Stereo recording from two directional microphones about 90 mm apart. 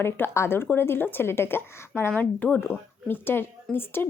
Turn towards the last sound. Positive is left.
turn(degrees=25)  # may be behind; listen again after turning